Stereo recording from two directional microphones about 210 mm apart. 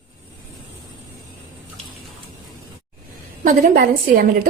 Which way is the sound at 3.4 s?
40° right (ahead or behind).